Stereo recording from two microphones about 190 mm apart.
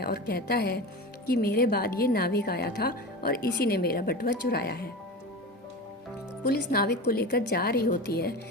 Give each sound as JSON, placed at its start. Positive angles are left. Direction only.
{"t": 0.0, "sound": "a woman's voice", "side_deg": 55}
{"t": 6.5, "sound": "a woman's voice", "side_deg": 55}